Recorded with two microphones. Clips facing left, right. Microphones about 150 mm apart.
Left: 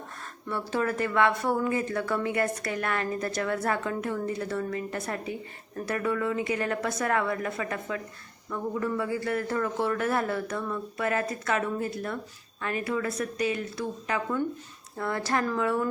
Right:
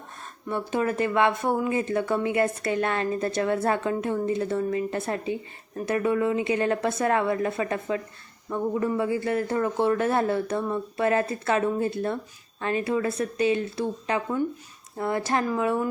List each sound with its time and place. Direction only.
0.4 s a man's voice: 20° right (ahead or behind)